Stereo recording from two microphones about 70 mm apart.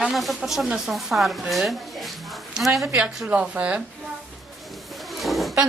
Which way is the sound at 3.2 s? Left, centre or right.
Centre.